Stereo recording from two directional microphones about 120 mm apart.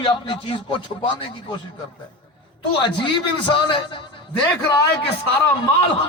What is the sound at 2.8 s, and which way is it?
A man's voice, 45° left (ahead or behind).